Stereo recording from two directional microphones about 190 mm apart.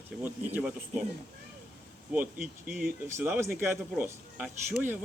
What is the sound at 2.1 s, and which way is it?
A man's voice, 10° right (ahead or behind).